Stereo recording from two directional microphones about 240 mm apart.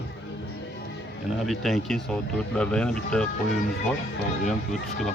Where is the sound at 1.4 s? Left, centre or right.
Centre.